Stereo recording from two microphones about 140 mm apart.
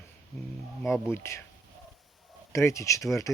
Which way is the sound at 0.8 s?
Centre (ahead or behind).